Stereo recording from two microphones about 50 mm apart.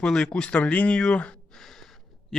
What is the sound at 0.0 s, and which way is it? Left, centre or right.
Speech, centre.